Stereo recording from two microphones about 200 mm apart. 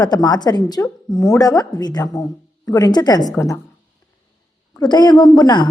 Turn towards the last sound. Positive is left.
turn(degrees=20)  # may be behind; listen again after turning